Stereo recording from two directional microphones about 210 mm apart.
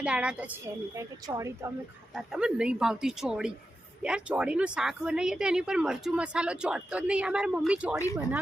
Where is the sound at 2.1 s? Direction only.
5° right (ahead or behind).